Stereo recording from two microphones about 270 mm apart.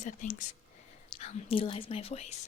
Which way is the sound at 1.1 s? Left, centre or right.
Left.